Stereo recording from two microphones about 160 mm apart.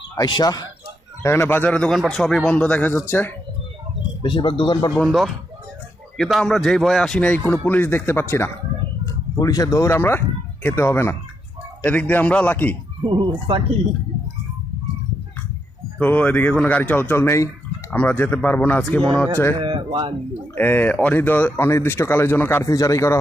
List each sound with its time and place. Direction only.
0.2 s a man's voice: 25° left (ahead or behind)
4.2 s speech: 30° left (ahead or behind)
4.9 s a man's voice: centre (ahead or behind)
13.0 s speech: 30° right (ahead or behind)
16.0 s a man's voice: 10° left (ahead or behind)
19.5 s speech: 30° right (ahead or behind)
20.6 s a man's voice: 10° left (ahead or behind)